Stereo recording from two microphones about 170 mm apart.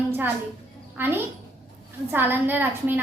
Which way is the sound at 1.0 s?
10° right (ahead or behind).